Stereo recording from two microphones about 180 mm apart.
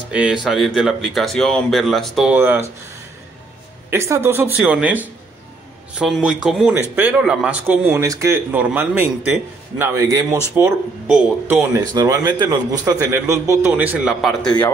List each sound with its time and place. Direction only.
0.1 s speech: 5° right (ahead or behind)
3.9 s a man's voice: 15° right (ahead or behind)